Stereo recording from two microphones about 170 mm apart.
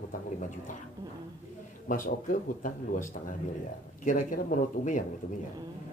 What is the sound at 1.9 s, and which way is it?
Speech, 55° left (ahead or behind).